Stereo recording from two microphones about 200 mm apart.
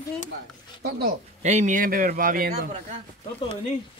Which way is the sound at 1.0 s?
35° right (ahead or behind).